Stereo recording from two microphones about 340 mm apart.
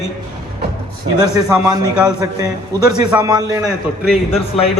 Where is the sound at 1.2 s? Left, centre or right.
Centre.